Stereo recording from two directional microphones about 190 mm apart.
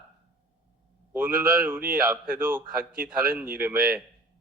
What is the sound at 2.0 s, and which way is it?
Speech, 50° right (ahead or behind).